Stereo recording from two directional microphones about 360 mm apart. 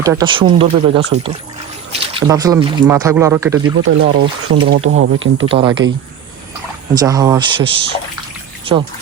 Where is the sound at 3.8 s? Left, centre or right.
Right.